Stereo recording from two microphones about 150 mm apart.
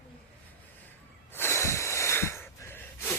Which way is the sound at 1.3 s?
15° left (ahead or behind).